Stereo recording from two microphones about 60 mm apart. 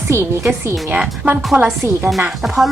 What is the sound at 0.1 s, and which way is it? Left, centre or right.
Speech, right.